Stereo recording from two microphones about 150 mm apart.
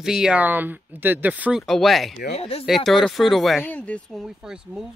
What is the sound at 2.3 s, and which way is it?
Speech, 40° left (ahead or behind).